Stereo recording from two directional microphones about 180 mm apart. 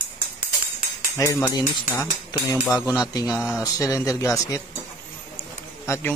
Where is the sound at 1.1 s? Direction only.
15° left (ahead or behind).